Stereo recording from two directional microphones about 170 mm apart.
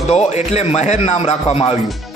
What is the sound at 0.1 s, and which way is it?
A man's voice, 40° left (ahead or behind).